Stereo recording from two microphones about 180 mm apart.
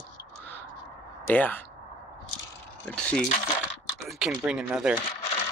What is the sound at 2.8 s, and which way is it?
Speech, 5° left (ahead or behind).